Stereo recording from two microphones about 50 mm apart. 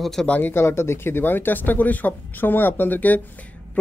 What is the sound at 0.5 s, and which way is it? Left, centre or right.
Speech, left.